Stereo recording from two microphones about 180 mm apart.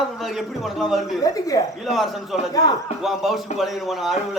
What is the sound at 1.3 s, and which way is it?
Speech, 20° left (ahead or behind).